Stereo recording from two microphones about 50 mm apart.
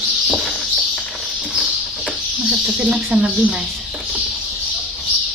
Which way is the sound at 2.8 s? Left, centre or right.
Right.